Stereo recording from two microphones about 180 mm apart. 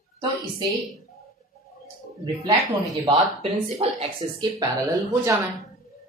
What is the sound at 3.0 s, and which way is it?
Speech, 30° right (ahead or behind).